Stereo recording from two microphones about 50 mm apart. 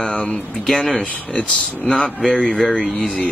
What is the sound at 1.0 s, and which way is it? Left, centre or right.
Speech, left.